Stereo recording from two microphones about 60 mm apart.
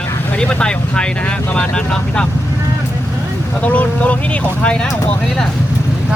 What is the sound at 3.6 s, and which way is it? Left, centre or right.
Speech, left.